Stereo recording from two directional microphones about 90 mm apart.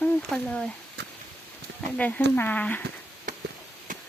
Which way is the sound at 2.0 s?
15° left (ahead or behind).